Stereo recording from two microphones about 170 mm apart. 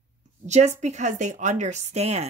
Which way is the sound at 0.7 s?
45° right (ahead or behind).